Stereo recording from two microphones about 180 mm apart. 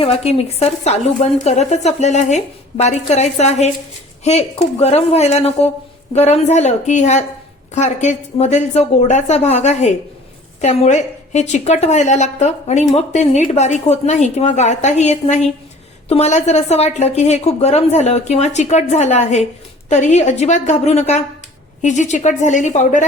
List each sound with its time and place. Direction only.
0.0 s a woman's voice: 35° left (ahead or behind)